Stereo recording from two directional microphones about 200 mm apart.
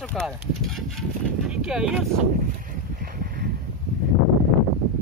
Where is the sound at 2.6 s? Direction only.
45° right (ahead or behind).